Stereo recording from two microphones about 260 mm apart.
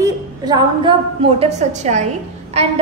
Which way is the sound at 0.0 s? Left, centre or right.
Centre.